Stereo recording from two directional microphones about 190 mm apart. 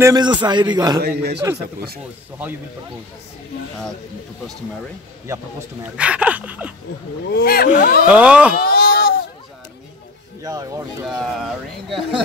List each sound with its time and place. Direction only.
0.0 s a man's voice: 20° right (ahead or behind)
1.0 s a man's voice: 60° right (ahead or behind)
5.3 s speech: 15° right (ahead or behind)
7.4 s speech: 50° left (ahead or behind)
8.1 s speech: 5° right (ahead or behind)
8.5 s a sound: 50° left (ahead or behind)
10.4 s a man's voice: 20° right (ahead or behind)
11.1 s speech: centre (ahead or behind)